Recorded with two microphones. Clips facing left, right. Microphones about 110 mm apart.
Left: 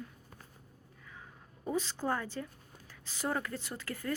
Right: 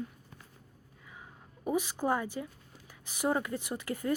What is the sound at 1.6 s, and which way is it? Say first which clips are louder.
Speech: right 3 dB; 15° right (ahead or behind).